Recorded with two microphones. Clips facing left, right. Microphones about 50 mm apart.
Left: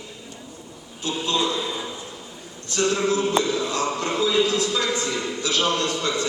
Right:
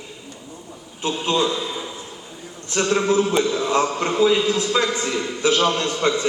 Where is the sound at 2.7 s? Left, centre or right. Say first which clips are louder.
Right 3 dB; right.